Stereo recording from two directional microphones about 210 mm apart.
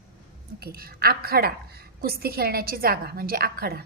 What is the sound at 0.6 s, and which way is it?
A woman's voice, 45° right (ahead or behind).